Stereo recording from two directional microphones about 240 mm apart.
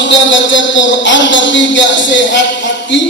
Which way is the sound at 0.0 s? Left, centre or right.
Left.